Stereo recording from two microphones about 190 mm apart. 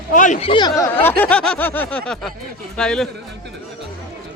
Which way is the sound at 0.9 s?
10° left (ahead or behind).